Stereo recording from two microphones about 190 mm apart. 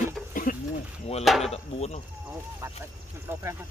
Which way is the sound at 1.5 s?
35° left (ahead or behind).